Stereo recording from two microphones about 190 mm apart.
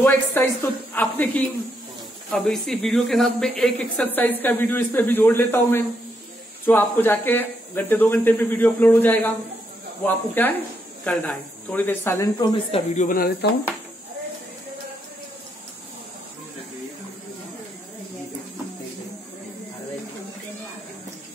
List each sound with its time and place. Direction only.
0.0 s speech: 10° left (ahead or behind)
12.7 s speech: 40° left (ahead or behind)